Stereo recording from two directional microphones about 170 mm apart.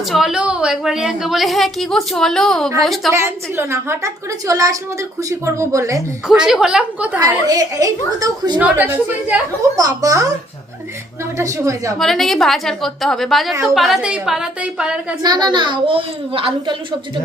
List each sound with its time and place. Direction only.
0.0 s a woman's voice: centre (ahead or behind)
3.1 s a woman's voice: 15° right (ahead or behind)
6.2 s a woman's voice: 5° right (ahead or behind)
7.2 s a child's voice: 20° right (ahead or behind)
8.5 s a woman's voice: 10° right (ahead or behind)
11.3 s a child's voice: 15° right (ahead or behind)
11.9 s a woman's voice: centre (ahead or behind)
15.2 s a child's voice: 25° right (ahead or behind)